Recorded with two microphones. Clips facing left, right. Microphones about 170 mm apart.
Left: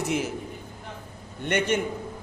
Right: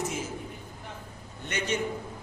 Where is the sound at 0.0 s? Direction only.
65° left (ahead or behind).